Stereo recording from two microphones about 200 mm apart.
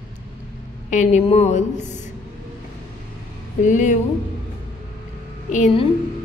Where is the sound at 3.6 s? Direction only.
40° left (ahead or behind).